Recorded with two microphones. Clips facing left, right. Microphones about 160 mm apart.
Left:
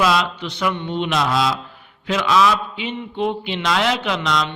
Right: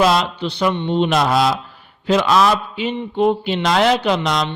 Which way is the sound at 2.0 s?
35° right (ahead or behind).